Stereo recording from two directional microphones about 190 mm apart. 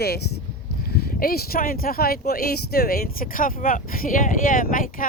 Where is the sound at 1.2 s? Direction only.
55° left (ahead or behind).